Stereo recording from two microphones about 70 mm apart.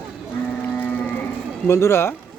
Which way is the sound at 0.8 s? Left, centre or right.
Left.